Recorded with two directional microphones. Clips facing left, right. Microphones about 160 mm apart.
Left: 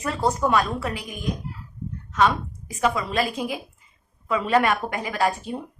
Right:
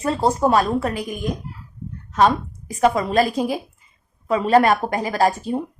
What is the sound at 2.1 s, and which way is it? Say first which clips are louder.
A woman's voice: right 4 dB; 35° right (ahead or behind).